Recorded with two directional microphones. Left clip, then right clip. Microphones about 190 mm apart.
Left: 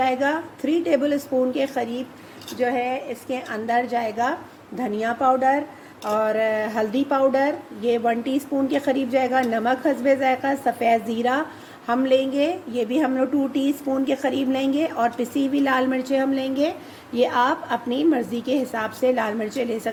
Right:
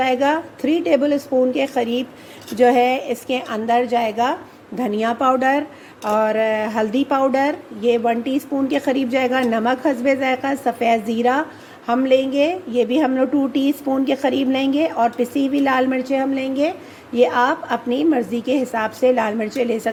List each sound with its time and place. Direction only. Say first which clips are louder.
0.0 s a woman's voice: right 4 dB; 20° right (ahead or behind)
2.5 s a woman's voice: right 9 dB; 40° right (ahead or behind)
6.1 s a woman's voice: right 4 dB; 20° right (ahead or behind)